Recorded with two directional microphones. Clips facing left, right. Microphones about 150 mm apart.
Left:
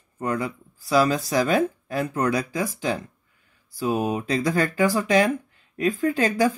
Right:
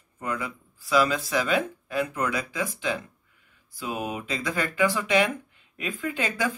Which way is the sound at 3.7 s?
40° left (ahead or behind).